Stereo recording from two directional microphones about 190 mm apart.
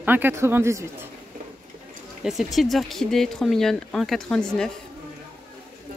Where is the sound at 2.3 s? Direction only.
Centre (ahead or behind).